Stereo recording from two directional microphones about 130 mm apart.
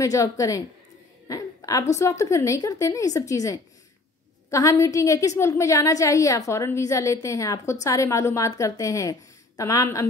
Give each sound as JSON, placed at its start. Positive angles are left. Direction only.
{"t": 0.0, "sound": "a woman's voice", "side_deg": 25}